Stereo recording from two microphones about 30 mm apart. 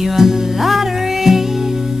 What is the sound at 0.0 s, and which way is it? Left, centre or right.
Music, centre.